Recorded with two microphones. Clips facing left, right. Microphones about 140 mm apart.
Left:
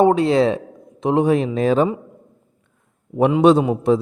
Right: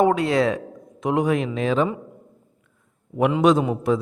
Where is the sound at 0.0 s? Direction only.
25° left (ahead or behind).